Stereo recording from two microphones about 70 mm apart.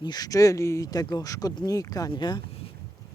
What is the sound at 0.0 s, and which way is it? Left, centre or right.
Speech, left.